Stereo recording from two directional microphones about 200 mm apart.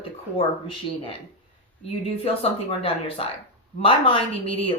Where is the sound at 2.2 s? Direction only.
30° left (ahead or behind).